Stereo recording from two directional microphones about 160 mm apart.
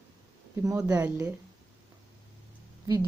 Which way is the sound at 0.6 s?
20° right (ahead or behind).